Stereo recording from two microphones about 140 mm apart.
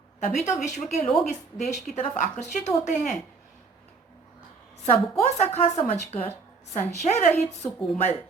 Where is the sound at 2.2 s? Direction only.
60° left (ahead or behind).